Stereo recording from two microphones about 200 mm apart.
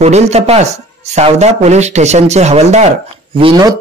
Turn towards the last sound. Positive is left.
turn(degrees=-20)  # may be behind; listen again after turning